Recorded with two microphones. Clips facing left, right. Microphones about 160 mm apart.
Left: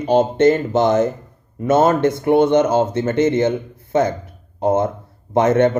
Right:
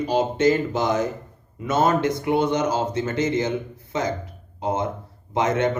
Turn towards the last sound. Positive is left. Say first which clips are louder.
# left 7 dB
turn(degrees=50)  # may be behind; listen again after turning